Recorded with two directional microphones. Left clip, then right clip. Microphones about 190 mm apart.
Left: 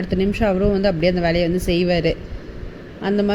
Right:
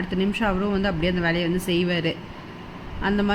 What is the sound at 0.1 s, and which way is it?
A woman's voice, 15° left (ahead or behind).